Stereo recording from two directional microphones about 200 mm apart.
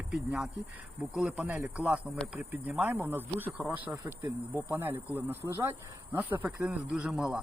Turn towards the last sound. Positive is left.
turn(degrees=-5)  # may be behind; listen again after turning